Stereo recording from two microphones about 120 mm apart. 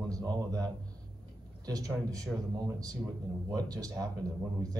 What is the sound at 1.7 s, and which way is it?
Speech, 30° right (ahead or behind).